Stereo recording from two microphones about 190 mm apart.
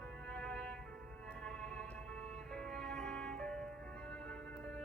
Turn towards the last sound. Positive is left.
turn(degrees=5)  # may be behind; listen again after turning